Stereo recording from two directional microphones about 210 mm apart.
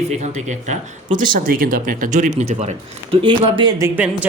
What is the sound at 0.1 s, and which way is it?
Speech, 35° right (ahead or behind).